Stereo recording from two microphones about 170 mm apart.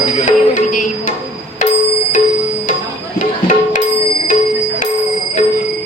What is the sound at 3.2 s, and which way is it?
Tabla, 50° left (ahead or behind).